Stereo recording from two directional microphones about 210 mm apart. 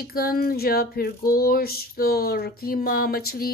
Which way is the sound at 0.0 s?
45° left (ahead or behind).